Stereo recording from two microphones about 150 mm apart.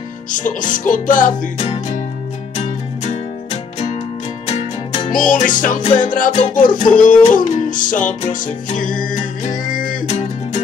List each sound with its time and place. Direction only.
0.3 s music: 60° left (ahead or behind)
1.6 s music: 40° left (ahead or behind)
4.5 s music: 45° left (ahead or behind); by 10.0 s 65° left (ahead or behind)
10.0 s music: 45° left (ahead or behind)